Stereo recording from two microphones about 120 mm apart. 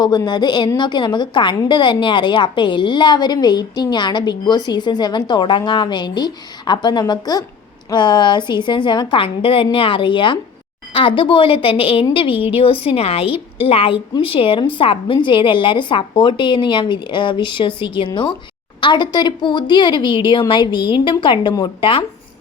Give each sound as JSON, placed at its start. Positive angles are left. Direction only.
{"t": 0.3, "sound": "a woman's voice", "side_deg": 40}